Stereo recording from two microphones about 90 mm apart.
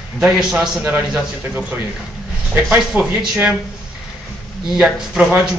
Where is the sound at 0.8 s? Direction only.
20° right (ahead or behind).